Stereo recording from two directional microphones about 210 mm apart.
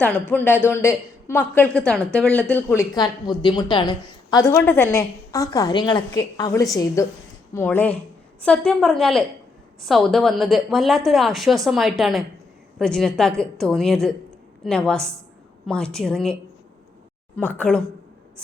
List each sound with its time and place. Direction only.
0.0 s a woman's voice: 10° left (ahead or behind)